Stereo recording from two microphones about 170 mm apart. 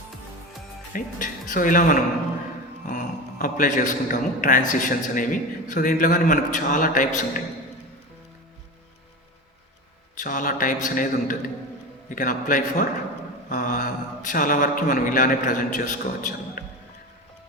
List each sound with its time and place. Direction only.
0.9 s a man's voice: 50° left (ahead or behind)
10.2 s speech: 50° left (ahead or behind)